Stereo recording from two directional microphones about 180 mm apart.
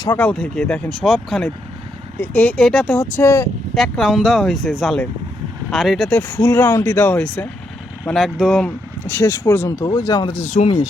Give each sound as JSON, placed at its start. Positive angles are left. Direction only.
{"t": 0.0, "sound": "speech", "side_deg": 10}
{"t": 3.8, "sound": "speech", "side_deg": 0}
{"t": 10.3, "sound": "speech", "side_deg": 40}